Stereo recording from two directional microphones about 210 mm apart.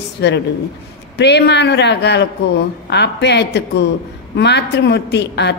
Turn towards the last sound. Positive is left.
turn(degrees=55)  # may be behind; listen again after turning